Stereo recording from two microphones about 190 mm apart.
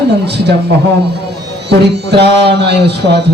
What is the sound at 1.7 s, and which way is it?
Speech, 60° right (ahead or behind).